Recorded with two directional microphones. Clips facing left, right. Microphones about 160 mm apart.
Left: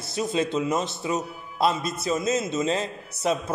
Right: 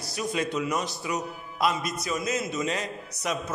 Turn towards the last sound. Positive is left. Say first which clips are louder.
# left 5 dB
turn(degrees=30)  # may be behind; listen again after turning